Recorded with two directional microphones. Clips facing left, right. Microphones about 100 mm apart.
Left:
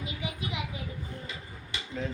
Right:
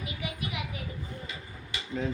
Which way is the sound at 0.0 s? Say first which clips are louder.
Even; 25° left (ahead or behind).